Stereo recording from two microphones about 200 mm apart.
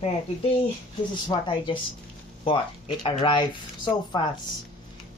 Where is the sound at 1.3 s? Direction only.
25° left (ahead or behind).